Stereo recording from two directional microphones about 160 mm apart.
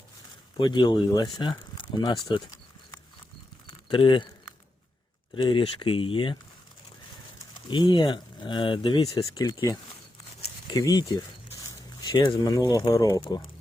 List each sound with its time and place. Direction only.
0.5 s speech: 30° left (ahead or behind)
3.7 s a sound: 30° left (ahead or behind)
5.3 s speech: 30° left (ahead or behind)
7.5 s speech: 30° left (ahead or behind)